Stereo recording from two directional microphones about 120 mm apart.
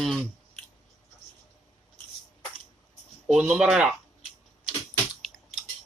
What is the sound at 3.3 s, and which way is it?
Speech, 5° right (ahead or behind).